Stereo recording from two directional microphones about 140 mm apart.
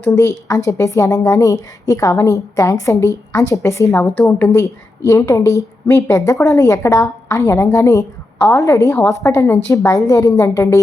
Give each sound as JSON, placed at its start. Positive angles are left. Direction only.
{"t": 0.0, "sound": "a woman's voice", "side_deg": 20}